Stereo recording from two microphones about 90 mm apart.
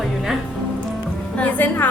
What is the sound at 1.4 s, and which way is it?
Speech, 20° left (ahead or behind).